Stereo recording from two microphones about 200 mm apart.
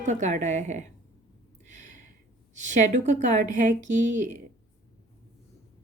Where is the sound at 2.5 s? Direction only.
40° right (ahead or behind).